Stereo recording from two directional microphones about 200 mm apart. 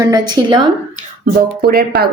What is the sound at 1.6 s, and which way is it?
Speech, 50° right (ahead or behind).